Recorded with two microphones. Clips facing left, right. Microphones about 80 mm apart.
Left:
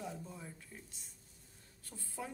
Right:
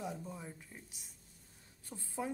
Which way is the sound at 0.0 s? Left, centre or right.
Centre.